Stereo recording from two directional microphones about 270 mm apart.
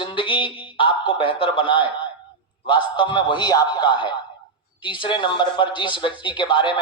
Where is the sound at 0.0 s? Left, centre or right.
Centre.